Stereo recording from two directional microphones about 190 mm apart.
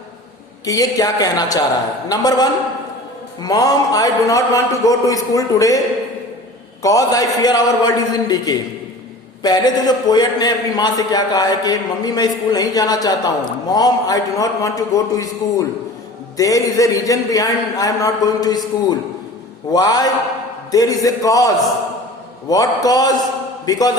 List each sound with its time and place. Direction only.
0.6 s a man's voice: 20° left (ahead or behind)
6.8 s a man's voice: 20° left (ahead or behind)